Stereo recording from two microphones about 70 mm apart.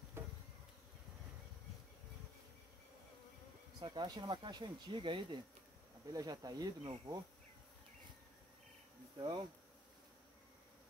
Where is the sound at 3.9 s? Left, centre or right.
Right.